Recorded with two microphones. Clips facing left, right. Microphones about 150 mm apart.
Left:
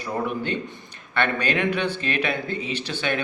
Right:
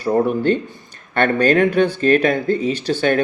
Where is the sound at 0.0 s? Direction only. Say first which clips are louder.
Right 10 dB; 45° right (ahead or behind).